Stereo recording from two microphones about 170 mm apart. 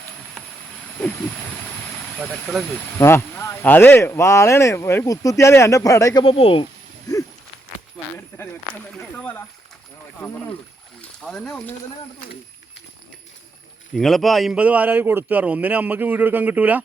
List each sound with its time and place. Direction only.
2.1 s a man's voice: 10° right (ahead or behind)
3.0 s speech: 15° left (ahead or behind)
6.2 s speech: 35° left (ahead or behind)
9.1 s speech: 10° left (ahead or behind)
11.0 s speech: centre (ahead or behind)
13.9 s a man's voice: centre (ahead or behind)